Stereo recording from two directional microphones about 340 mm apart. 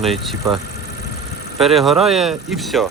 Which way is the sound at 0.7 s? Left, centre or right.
Left.